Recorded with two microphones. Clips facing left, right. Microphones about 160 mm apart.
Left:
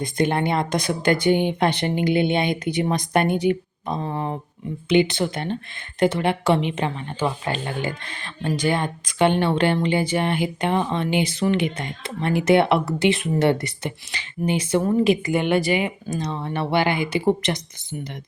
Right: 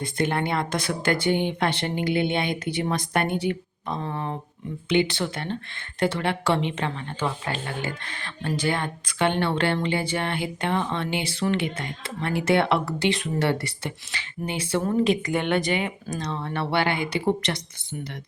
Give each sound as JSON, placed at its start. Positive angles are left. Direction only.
{"t": 0.0, "sound": "a woman's voice", "side_deg": 20}